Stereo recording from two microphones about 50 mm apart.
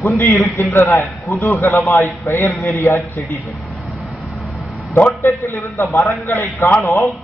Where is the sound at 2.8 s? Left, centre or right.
Left.